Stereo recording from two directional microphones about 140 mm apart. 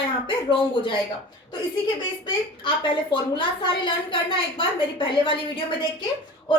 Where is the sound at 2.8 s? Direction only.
35° left (ahead or behind).